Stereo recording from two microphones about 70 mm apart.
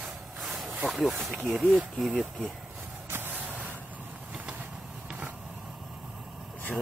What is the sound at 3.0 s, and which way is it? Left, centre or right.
Vehicle, right.